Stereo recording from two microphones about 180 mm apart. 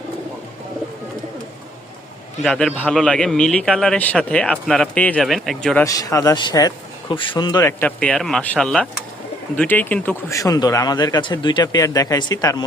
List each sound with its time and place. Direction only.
2.4 s a man's voice: 5° left (ahead or behind)
5.8 s speech: 20° left (ahead or behind)